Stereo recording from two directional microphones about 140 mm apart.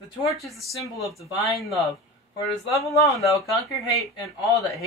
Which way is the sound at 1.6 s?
Centre (ahead or behind).